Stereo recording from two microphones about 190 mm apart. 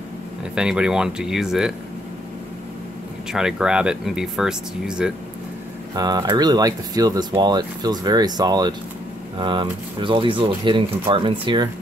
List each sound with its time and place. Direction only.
0.6 s speech: 5° right (ahead or behind)
3.3 s speech: 5° right (ahead or behind)
5.9 s speech: 20° right (ahead or behind)